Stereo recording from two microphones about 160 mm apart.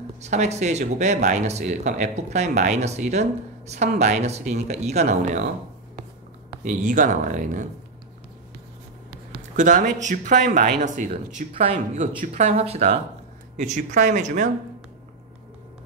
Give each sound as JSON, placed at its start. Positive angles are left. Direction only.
{"t": 0.2, "sound": "speech", "side_deg": -45}
{"t": 6.6, "sound": "speech", "side_deg": -50}
{"t": 9.6, "sound": "speech", "side_deg": -50}
{"t": 13.6, "sound": "speech", "side_deg": -50}